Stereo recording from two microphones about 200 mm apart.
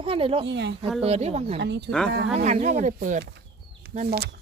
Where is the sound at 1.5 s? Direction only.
55° right (ahead or behind).